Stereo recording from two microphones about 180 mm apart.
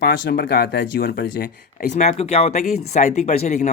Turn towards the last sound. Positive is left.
turn(degrees=40)  # may be behind; listen again after turning